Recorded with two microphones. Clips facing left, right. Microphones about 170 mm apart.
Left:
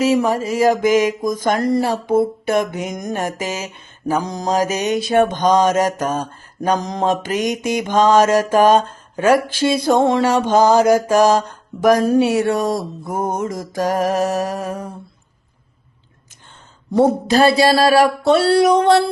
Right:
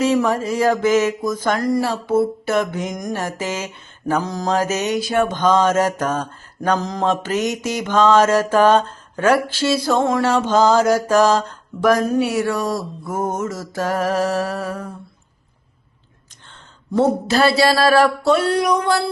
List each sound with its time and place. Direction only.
0.0 s mantra: 10° left (ahead or behind)
10.2 s mantra: 10° left (ahead or behind)
12.0 s mantra: 30° left (ahead or behind); by 14.9 s 10° left (ahead or behind)
17.1 s mantra: 20° left (ahead or behind)
18.4 s a sound: 30° left (ahead or behind)